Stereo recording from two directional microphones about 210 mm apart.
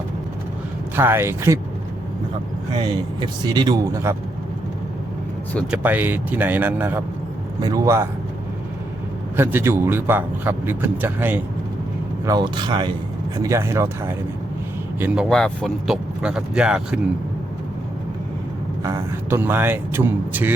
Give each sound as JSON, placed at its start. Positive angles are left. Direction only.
{"t": 0.9, "sound": "a man's voice", "side_deg": -10}
{"t": 2.7, "sound": "speech", "side_deg": -20}
{"t": 5.7, "sound": "a man's voice", "side_deg": -10}
{"t": 9.3, "sound": "a man's voice", "side_deg": -10}
{"t": 12.2, "sound": "a man's voice", "side_deg": -20}
{"t": 15.0, "sound": "speech", "side_deg": -5}
{"t": 18.8, "sound": "a man's voice", "side_deg": -15}